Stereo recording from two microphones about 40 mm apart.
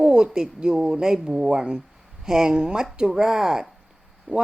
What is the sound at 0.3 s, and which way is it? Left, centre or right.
Speech, centre.